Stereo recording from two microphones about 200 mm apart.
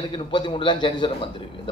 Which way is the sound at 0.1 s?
25° left (ahead or behind).